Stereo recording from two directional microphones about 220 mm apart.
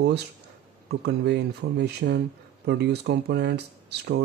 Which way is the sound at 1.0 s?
50° right (ahead or behind).